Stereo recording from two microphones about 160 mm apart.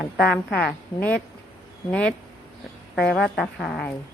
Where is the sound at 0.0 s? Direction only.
5° left (ahead or behind).